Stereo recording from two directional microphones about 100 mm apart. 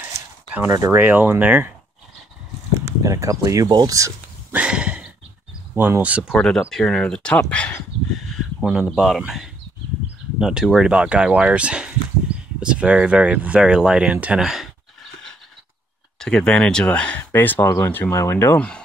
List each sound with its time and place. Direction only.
0.7 s speech: 35° right (ahead or behind)
0.9 s speech: 20° right (ahead or behind)
2.8 s speech: 30° right (ahead or behind)
4.5 s a sound: 10° right (ahead or behind)
5.8 s speech: 20° right (ahead or behind)
6.2 s speech: 5° left (ahead or behind)
10.4 s speech: 5° right (ahead or behind)
14.4 s speech: 5° right (ahead or behind)
16.2 s speech: 10° left (ahead or behind)
17.3 s speech: 20° left (ahead or behind)